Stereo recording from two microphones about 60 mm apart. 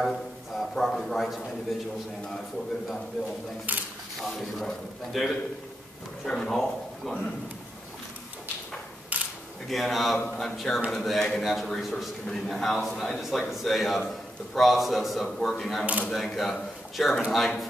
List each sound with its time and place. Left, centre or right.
0.0 s a man's voice: centre
3.7 s speech: right
4.2 s a man's voice: centre
9.1 s camera: right
9.7 s a man's voice: centre